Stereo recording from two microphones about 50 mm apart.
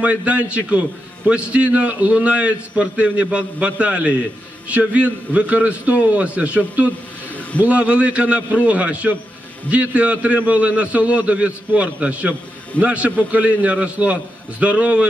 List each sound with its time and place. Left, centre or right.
0.0 s a man's voice: right
7.6 s a man's voice: right